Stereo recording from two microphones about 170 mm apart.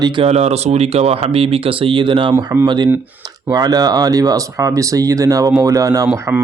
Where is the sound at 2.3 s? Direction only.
15° right (ahead or behind).